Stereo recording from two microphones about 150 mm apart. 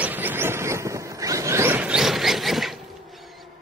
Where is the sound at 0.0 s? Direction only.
10° right (ahead or behind).